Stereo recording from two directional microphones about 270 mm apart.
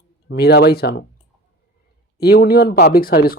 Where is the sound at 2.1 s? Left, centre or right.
Left.